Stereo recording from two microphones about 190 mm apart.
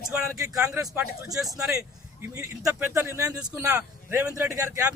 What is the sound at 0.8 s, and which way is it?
A man's voice, 20° right (ahead or behind).